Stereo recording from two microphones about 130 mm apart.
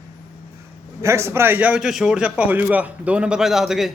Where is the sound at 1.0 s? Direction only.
20° right (ahead or behind); by 3.9 s 5° right (ahead or behind).